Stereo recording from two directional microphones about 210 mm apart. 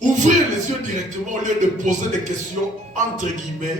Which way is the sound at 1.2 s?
35° right (ahead or behind).